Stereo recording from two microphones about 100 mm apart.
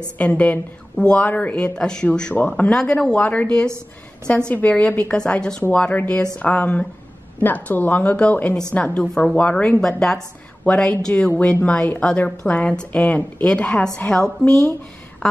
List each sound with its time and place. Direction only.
0.2 s a woman's voice: 15° left (ahead or behind)